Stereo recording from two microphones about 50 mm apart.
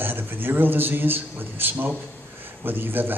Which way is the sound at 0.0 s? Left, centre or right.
Right.